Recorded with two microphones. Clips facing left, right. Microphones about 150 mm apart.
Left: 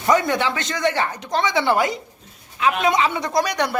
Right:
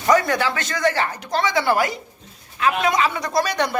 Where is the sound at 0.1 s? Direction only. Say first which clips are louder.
Right 1 dB; 20° left (ahead or behind).